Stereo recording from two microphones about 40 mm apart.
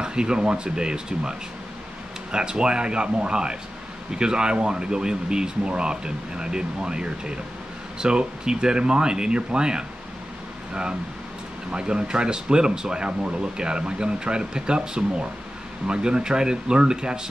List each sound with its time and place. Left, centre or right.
0.0 s speech: right
2.3 s speech: right